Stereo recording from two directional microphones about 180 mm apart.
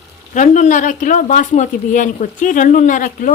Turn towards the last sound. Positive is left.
turn(degrees=45)  # may be behind; listen again after turning